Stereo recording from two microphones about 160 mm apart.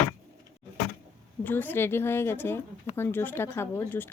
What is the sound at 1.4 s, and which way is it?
Speech, 10° left (ahead or behind).